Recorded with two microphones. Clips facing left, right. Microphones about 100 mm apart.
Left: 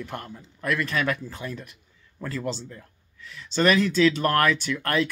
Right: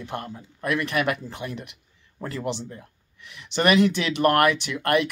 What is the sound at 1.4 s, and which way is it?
Speech, 35° right (ahead or behind).